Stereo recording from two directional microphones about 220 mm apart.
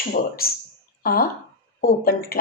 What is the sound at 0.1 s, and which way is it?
Speech, 45° left (ahead or behind).